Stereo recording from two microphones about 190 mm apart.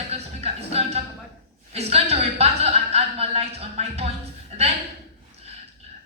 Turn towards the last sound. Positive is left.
turn(degrees=-30)  # may be behind; listen again after turning